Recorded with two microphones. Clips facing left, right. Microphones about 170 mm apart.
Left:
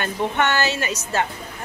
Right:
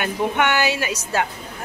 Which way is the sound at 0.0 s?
10° right (ahead or behind).